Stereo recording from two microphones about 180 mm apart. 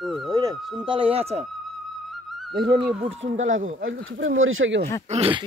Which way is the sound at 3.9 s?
90° right.